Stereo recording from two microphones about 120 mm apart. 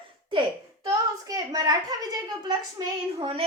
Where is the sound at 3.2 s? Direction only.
45° right (ahead or behind).